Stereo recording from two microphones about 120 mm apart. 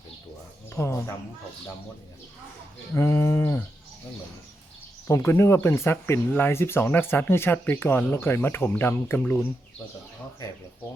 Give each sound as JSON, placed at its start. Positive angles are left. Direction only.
{"t": 0.7, "sound": "speech", "side_deg": 20}
{"t": 2.9, "sound": "livestock", "side_deg": 25}
{"t": 5.0, "sound": "speech", "side_deg": 20}